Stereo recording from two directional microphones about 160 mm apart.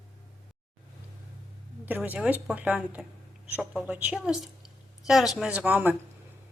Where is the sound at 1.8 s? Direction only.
10° right (ahead or behind).